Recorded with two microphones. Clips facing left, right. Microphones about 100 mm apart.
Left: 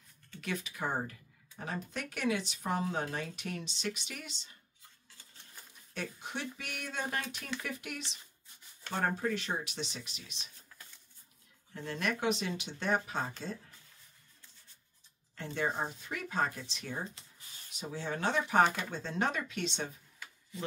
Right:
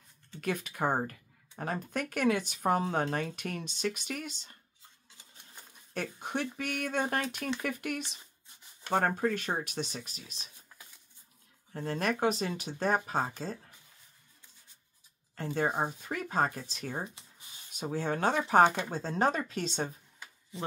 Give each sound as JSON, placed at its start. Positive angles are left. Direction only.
{"t": 0.4, "sound": "speech", "side_deg": -50}
{"t": 5.1, "sound": "cutlery", "side_deg": -20}
{"t": 5.9, "sound": "speech", "side_deg": -50}
{"t": 11.7, "sound": "speech", "side_deg": -40}
{"t": 15.3, "sound": "speech", "side_deg": -45}
{"t": 17.0, "sound": "a sound", "side_deg": -20}
{"t": 17.7, "sound": "speech", "side_deg": -45}
{"t": 18.4, "sound": "speech", "side_deg": -30}